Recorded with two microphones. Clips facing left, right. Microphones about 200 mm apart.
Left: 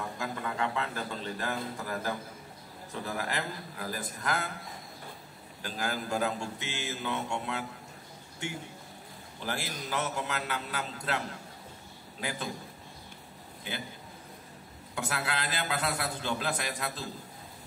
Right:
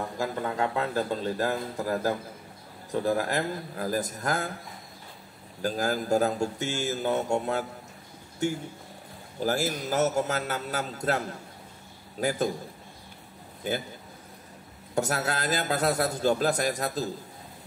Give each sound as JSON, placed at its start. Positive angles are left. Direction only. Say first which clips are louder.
{"t": 0.2, "sound": "a man's voice", "louder": "right 6 dB", "side_deg": -40}
{"t": 5.6, "sound": "a man's voice", "louder": "right 7 dB", "side_deg": -40}
{"t": 9.4, "sound": "a man's voice", "louder": "right 9 dB", "side_deg": -40}
{"t": 15.0, "sound": "a man's voice", "louder": "right 6 dB", "side_deg": -45}